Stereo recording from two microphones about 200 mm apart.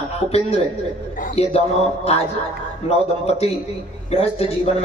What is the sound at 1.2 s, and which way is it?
Speech, 30° left (ahead or behind).